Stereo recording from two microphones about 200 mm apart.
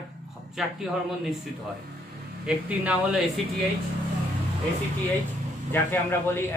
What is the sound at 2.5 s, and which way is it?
Speech, 5° right (ahead or behind).